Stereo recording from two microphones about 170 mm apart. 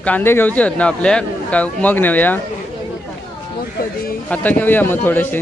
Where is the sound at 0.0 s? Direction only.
10° left (ahead or behind).